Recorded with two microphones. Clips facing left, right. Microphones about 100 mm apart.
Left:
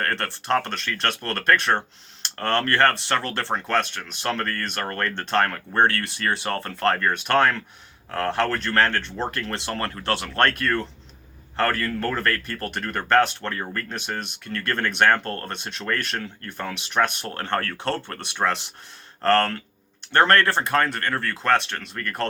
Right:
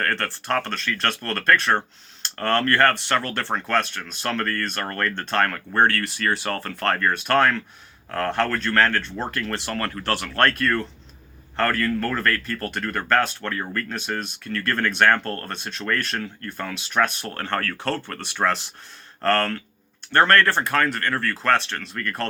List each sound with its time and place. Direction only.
0.0 s speech: 30° left (ahead or behind)
11.5 s speech: 25° left (ahead or behind)